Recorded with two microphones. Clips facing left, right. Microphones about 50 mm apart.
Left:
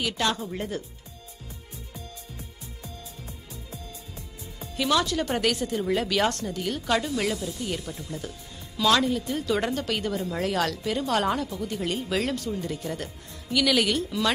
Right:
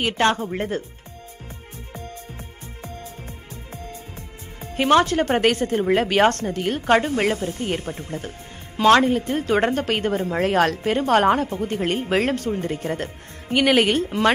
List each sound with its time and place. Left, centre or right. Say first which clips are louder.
0.0 s a woman's voice: right 7 dB; right
4.6 s a woman's voice: right 8 dB; right